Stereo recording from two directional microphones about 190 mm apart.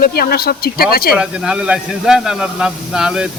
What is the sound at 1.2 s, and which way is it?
Speech, 5° right (ahead or behind).